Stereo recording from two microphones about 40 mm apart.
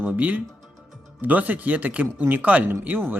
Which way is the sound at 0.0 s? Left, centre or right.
Right.